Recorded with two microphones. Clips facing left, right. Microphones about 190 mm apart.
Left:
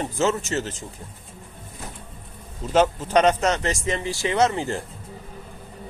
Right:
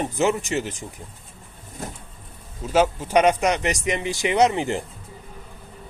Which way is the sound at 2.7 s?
10° right (ahead or behind).